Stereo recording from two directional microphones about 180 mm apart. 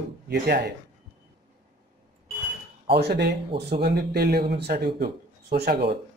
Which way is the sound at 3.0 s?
65° right (ahead or behind).